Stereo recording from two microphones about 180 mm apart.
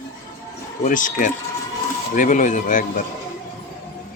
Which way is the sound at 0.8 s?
45° left (ahead or behind).